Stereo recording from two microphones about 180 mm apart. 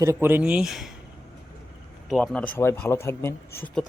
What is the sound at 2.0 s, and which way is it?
Speech, 5° left (ahead or behind).